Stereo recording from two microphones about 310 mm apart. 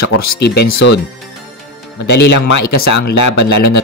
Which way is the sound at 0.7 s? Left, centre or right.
Left.